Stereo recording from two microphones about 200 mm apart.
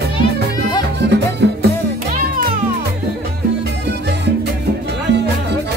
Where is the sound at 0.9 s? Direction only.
60° right (ahead or behind).